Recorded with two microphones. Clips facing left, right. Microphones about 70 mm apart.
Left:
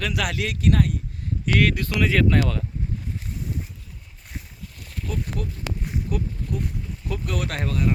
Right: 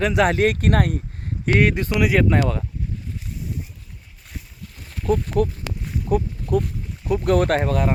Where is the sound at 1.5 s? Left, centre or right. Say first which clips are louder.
Right 3 dB; right.